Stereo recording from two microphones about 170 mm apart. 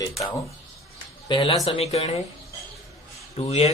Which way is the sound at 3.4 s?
35° left (ahead or behind).